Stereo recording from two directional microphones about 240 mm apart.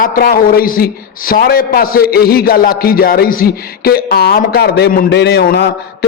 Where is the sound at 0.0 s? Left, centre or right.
Left.